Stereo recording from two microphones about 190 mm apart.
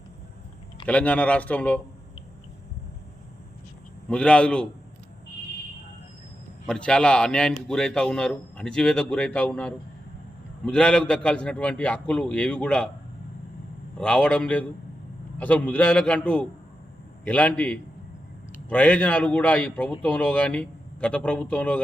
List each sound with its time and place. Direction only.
0.9 s a man's voice: 5° left (ahead or behind)
4.1 s a man's voice: 5° left (ahead or behind)
6.7 s a man's voice: 5° left (ahead or behind)
14.0 s a man's voice: 5° left (ahead or behind)